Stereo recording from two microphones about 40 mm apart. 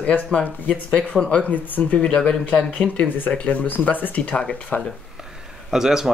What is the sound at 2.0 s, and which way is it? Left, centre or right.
Speech, centre.